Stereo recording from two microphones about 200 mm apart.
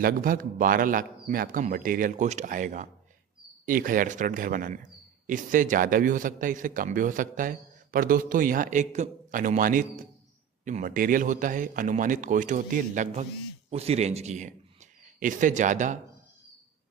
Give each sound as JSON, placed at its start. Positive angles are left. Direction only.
{"t": 0.0, "sound": "a man's voice", "side_deg": -45}